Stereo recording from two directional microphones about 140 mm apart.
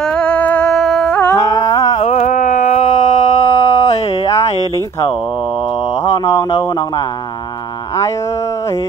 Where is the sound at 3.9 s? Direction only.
50° left (ahead or behind).